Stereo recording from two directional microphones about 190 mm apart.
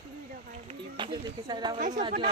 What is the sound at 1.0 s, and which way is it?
Speech, 25° right (ahead or behind).